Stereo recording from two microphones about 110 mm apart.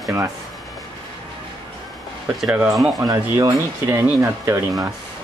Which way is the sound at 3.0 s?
35° right (ahead or behind).